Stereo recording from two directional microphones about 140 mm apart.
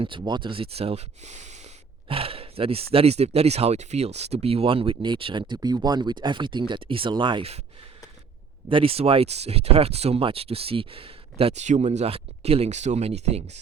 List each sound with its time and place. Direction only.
0.0 s speech: 35° right (ahead or behind)
8.7 s speech: 40° right (ahead or behind)